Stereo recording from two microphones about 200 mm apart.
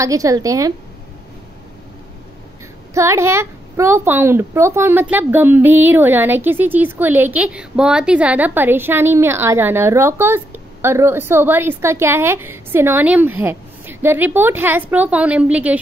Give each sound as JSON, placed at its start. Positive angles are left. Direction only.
{"t": 0.0, "sound": "a woman's voice", "side_deg": -15}
{"t": 2.9, "sound": "a woman's voice", "side_deg": -15}